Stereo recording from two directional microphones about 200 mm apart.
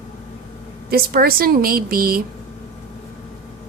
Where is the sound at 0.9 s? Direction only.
50° right (ahead or behind).